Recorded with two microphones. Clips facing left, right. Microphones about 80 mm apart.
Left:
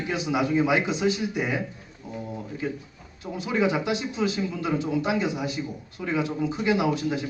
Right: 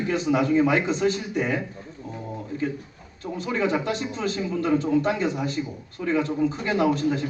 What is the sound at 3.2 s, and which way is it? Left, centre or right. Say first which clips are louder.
A man's voice: left 1 dB; centre.